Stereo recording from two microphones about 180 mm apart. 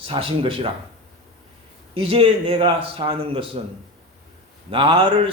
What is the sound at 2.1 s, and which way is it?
A man's voice, 30° right (ahead or behind).